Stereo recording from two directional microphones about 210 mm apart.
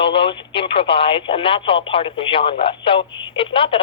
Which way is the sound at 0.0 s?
25° left (ahead or behind).